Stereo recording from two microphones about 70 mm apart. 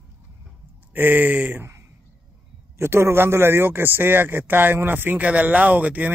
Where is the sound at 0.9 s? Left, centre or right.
Right.